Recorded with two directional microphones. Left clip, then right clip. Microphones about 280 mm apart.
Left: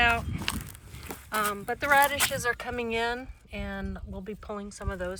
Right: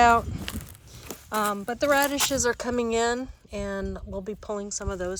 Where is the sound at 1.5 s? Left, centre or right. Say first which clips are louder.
Left 2 dB; centre.